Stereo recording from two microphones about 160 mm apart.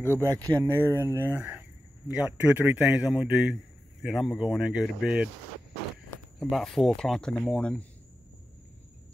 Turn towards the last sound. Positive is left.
turn(degrees=5)  # may be behind; listen again after turning